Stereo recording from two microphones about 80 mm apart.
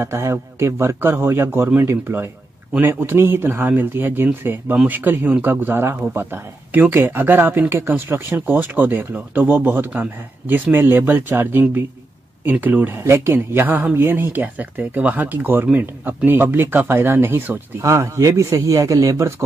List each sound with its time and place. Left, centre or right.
0.0 s speech: right
17.8 s a man's voice: right